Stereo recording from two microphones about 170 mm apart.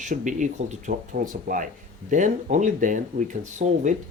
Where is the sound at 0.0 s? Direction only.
45° right (ahead or behind).